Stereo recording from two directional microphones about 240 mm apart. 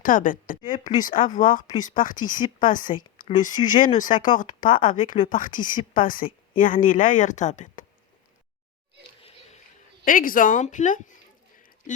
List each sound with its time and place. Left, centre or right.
0.0 s speech: left
10.0 s speech: left